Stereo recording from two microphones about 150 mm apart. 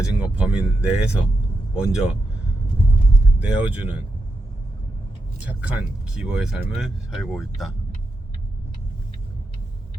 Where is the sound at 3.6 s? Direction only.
10° right (ahead or behind).